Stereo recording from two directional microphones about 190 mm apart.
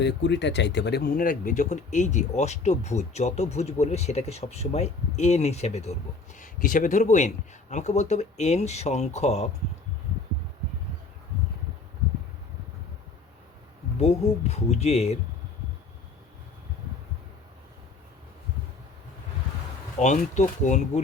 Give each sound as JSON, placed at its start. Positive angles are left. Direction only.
{"t": 0.0, "sound": "speech", "side_deg": 65}
{"t": 14.0, "sound": "speech", "side_deg": 35}
{"t": 20.0, "sound": "speech", "side_deg": 40}